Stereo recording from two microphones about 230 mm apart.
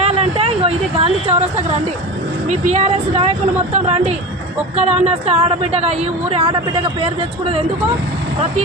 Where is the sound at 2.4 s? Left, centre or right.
Right.